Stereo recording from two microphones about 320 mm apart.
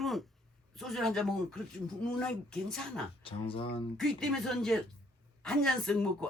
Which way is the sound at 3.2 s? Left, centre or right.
Centre.